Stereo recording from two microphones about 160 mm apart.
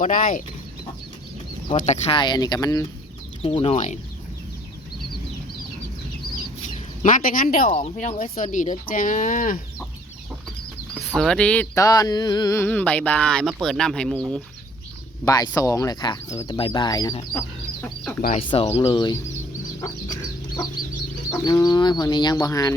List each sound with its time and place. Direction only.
0.0 s speech: 55° left (ahead or behind)
1.9 s speech: 35° left (ahead or behind)
3.4 s speech: 35° left (ahead or behind)
7.0 s speech: 60° left (ahead or behind)
11.0 s speech: 5° left (ahead or behind)
11.8 s speech: 25° left (ahead or behind)
12.6 s speech: 10° left (ahead or behind)
15.2 s speech: 25° left (ahead or behind)
17.8 s speech: 5° left (ahead or behind)
18.3 s speech: 35° left (ahead or behind)
21.4 s speech: 25° left (ahead or behind)